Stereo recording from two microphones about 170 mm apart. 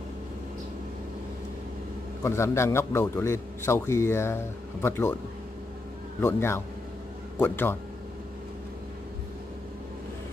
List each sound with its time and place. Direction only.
2.2 s a man's voice: 15° left (ahead or behind)
6.2 s a man's voice: 15° left (ahead or behind)